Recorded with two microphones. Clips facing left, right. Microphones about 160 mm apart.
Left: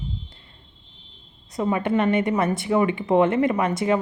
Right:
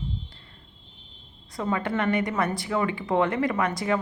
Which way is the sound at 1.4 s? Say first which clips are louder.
Left 5 dB; 20° left (ahead or behind).